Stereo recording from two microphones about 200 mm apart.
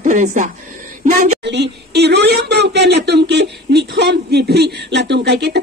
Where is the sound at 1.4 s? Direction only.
60° right (ahead or behind).